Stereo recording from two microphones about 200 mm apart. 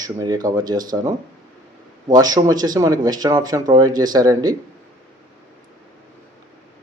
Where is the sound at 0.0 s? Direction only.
20° right (ahead or behind).